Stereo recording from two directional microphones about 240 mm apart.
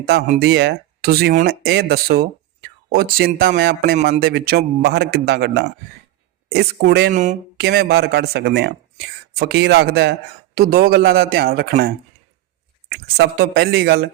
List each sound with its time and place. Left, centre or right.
0.0 s a man's voice: right
13.1 s a man's voice: right